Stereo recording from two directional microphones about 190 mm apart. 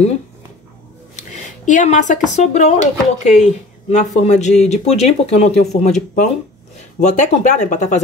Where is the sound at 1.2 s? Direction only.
40° left (ahead or behind).